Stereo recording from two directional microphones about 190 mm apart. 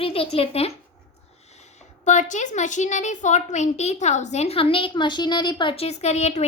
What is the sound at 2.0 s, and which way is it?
A child's voice, 40° left (ahead or behind).